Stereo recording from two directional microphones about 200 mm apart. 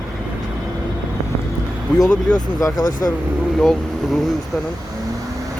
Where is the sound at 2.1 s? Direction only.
20° left (ahead or behind).